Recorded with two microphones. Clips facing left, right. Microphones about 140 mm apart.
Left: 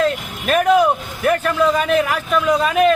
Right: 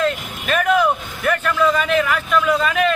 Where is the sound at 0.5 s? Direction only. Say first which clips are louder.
Left 3 dB; 35° left (ahead or behind).